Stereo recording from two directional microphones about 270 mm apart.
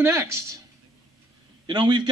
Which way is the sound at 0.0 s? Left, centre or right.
Centre.